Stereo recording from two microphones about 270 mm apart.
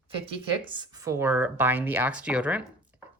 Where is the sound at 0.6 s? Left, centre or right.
Centre.